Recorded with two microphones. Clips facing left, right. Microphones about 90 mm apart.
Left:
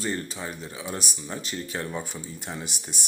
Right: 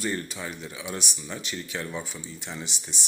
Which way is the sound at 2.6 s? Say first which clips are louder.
Left 2 dB; 50° left (ahead or behind).